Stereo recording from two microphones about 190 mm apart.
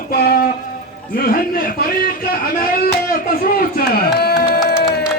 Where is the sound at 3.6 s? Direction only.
55° left (ahead or behind).